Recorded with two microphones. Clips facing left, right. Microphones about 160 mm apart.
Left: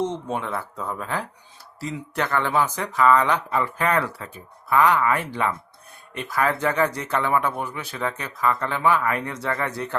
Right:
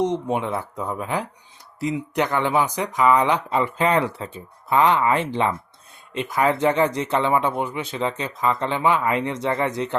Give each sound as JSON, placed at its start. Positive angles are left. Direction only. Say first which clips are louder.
{"t": 0.0, "sound": "speech", "louder": "right 4 dB", "side_deg": -15}